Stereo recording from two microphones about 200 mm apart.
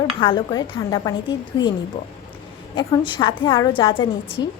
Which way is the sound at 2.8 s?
25° left (ahead or behind).